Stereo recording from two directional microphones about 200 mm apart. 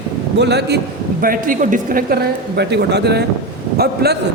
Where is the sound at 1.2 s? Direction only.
45° right (ahead or behind).